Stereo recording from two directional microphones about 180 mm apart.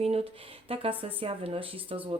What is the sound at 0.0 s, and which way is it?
Speech, 35° right (ahead or behind).